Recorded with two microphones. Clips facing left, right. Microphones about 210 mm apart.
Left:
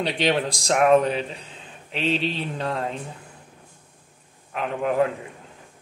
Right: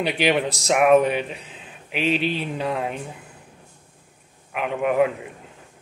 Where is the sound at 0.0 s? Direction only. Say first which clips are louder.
Right 2 dB; 10° right (ahead or behind).